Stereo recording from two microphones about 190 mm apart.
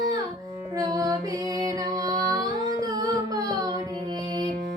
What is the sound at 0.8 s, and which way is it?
Music, 20° right (ahead or behind).